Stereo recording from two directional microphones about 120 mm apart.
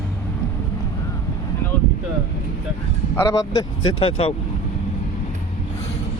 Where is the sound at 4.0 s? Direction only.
55° left (ahead or behind).